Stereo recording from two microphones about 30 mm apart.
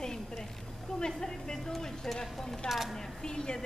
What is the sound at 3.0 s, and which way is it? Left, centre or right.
Speech, centre.